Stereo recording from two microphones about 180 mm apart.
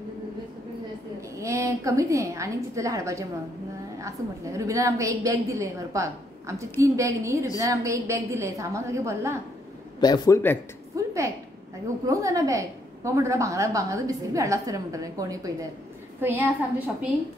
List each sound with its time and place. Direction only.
1.4 s a woman's voice: 15° right (ahead or behind)
9.9 s a man's voice: 20° left (ahead or behind)
11.0 s a sound: 15° right (ahead or behind)
12.1 s a woman's voice: 20° right (ahead or behind)